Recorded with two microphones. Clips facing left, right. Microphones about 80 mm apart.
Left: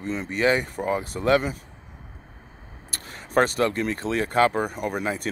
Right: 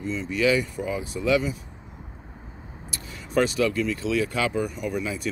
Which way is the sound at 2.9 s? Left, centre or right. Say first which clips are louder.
Left 2 dB; left.